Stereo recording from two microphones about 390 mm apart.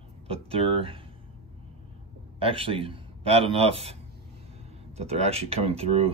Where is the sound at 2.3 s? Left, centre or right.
Centre.